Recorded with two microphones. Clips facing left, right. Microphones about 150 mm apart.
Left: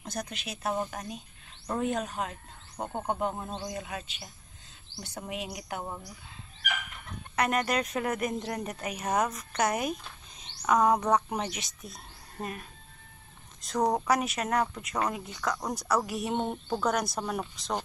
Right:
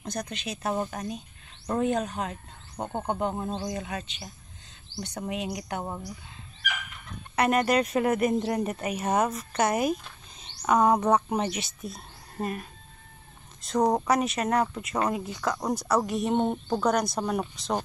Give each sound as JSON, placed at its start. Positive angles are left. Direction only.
{"t": 0.0, "sound": "a woman's voice", "side_deg": 5}
{"t": 7.3, "sound": "a woman's voice", "side_deg": -5}
{"t": 13.7, "sound": "speech", "side_deg": -20}
{"t": 14.0, "sound": "a woman's voice", "side_deg": 0}